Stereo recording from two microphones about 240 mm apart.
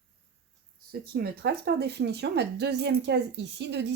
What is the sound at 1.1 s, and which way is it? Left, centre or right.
Speech, right.